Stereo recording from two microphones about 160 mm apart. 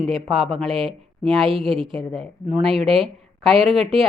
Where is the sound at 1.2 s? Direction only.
35° right (ahead or behind).